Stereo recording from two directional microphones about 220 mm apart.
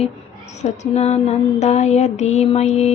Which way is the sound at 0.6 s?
30° left (ahead or behind).